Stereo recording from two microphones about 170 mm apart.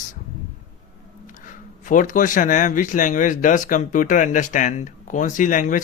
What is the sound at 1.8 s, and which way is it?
Speech, 50° left (ahead or behind).